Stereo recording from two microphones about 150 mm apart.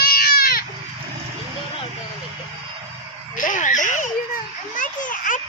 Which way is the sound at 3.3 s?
60° left (ahead or behind).